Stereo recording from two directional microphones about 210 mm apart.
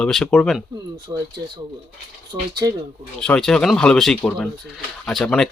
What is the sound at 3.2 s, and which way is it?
Speech, 5° left (ahead or behind).